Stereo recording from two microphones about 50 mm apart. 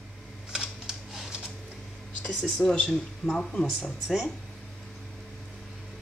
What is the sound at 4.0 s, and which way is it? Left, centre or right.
Speech, centre.